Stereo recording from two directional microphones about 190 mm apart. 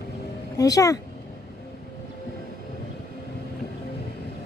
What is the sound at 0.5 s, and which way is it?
Speech, 20° left (ahead or behind).